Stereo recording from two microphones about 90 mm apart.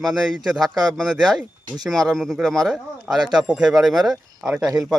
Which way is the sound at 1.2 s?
50° right (ahead or behind).